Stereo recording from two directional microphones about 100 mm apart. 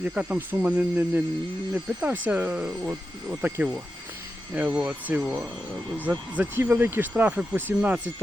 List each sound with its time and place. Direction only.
0.0 s speech: 15° right (ahead or behind)